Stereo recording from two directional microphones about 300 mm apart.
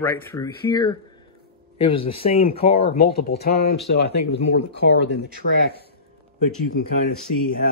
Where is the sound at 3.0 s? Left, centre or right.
Left.